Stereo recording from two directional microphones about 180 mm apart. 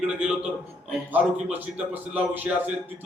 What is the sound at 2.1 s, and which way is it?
Speech, 10° right (ahead or behind).